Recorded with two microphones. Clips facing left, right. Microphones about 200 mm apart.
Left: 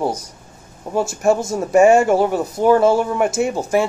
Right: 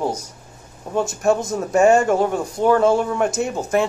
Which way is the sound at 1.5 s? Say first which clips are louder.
Left 3 dB; 15° left (ahead or behind).